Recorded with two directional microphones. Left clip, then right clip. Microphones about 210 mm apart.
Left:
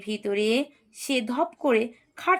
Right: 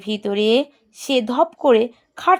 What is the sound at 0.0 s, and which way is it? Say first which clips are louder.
A woman's voice: right 6 dB; 40° right (ahead or behind).